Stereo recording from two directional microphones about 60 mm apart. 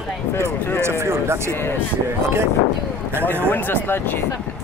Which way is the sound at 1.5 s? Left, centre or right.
Left.